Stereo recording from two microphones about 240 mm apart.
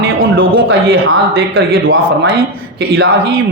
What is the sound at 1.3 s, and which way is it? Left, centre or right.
Speech, right.